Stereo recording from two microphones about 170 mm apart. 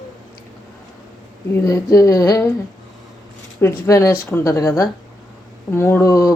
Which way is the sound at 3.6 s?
15° left (ahead or behind).